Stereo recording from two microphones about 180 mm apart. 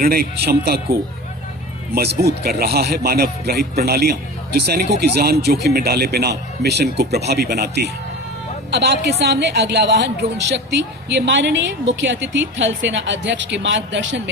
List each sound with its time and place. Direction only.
0.0 s a man's voice: 60° right (ahead or behind)
2.4 s a man's voice: 60° right (ahead or behind); by 14.2 s 90° right